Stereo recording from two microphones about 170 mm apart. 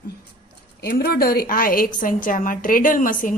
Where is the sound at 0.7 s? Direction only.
65° left (ahead or behind).